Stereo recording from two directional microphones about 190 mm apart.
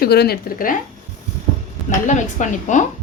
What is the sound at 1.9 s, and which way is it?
Speech, 40° left (ahead or behind).